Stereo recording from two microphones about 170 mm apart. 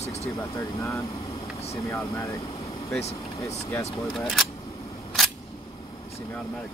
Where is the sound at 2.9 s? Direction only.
40° left (ahead or behind).